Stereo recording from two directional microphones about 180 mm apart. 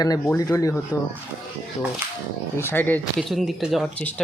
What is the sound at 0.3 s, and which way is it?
Speech, 15° left (ahead or behind).